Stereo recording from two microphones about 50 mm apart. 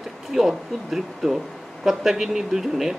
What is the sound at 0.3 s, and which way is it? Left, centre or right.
Speech, centre.